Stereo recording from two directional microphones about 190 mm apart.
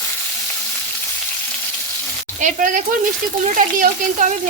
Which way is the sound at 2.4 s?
45° right (ahead or behind).